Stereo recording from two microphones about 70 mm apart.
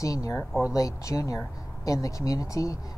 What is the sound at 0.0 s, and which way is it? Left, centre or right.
Speech, left.